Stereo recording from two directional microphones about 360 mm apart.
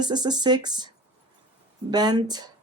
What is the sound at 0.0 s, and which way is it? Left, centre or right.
Speech, centre.